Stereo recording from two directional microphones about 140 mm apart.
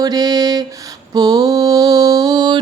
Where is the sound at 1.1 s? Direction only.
30° right (ahead or behind).